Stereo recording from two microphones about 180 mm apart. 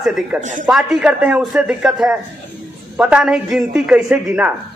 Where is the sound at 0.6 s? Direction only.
5° right (ahead or behind).